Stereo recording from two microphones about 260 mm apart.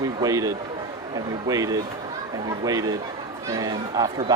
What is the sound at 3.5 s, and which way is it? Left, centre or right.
Speech, centre.